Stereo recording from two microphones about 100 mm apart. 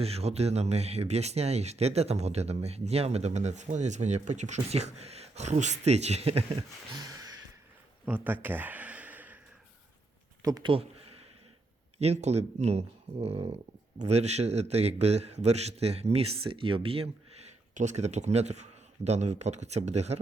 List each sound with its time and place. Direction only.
0.0 s speech: 90° right
4.0 s speech: 65° right (ahead or behind)
4.7 s speech: 90° right
6.9 s gasp: 35° right (ahead or behind)
8.0 s a sound: 20° right (ahead or behind)
10.6 s a sound: 70° right (ahead or behind)
11.9 s speech: 90° right; by 17.1 s 70° right (ahead or behind)
17.9 s speech: 90° right